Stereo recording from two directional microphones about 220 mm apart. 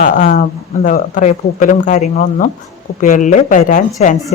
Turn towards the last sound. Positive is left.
turn(degrees=35)  # may be behind; listen again after turning